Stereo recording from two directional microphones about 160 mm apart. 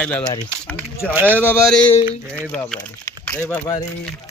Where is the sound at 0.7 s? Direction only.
10° left (ahead or behind).